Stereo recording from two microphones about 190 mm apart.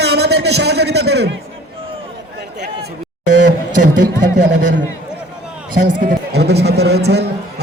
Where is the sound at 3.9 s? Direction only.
65° right (ahead or behind).